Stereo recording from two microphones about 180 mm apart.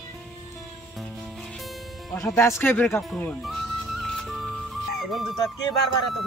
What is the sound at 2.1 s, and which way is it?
Music, 15° left (ahead or behind).